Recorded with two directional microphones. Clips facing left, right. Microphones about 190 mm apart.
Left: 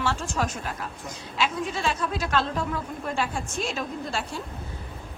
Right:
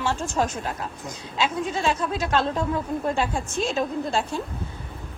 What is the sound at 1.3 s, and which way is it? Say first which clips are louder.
A woman's voice: right 2 dB; 20° right (ahead or behind).